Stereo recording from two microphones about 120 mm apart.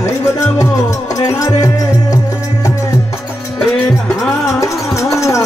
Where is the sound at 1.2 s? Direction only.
25° left (ahead or behind).